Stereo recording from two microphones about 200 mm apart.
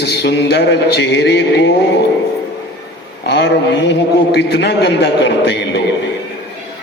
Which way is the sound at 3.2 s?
60° left (ahead or behind).